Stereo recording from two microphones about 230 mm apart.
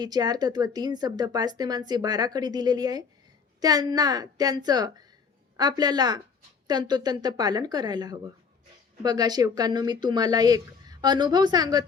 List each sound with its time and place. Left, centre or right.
0.0 s speech: centre